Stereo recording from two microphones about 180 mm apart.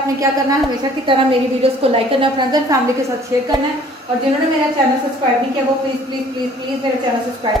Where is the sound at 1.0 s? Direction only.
30° right (ahead or behind).